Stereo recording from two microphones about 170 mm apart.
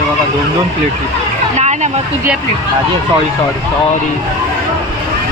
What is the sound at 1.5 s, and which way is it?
Vehicle, 45° right (ahead or behind).